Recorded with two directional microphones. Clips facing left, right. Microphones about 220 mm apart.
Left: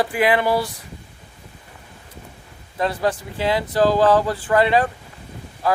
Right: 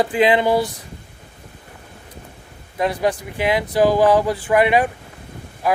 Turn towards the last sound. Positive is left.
turn(degrees=-15)  # may be behind; listen again after turning